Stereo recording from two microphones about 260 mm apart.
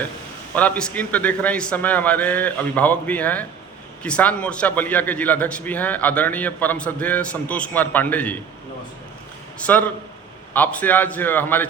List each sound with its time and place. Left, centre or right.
0.5 s a man's voice: centre
9.6 s a man's voice: centre